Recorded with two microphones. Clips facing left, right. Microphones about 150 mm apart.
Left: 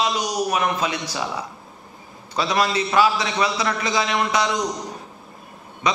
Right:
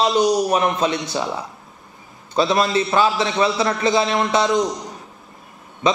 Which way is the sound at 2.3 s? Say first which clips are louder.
Right 4 dB; 25° right (ahead or behind).